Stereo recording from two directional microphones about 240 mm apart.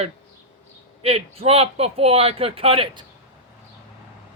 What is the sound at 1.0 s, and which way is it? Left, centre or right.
Speech, right.